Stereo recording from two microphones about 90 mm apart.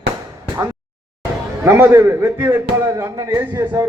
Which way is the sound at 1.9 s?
30° right (ahead or behind).